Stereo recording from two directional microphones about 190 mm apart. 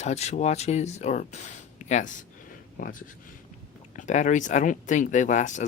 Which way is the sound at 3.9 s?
40° left (ahead or behind).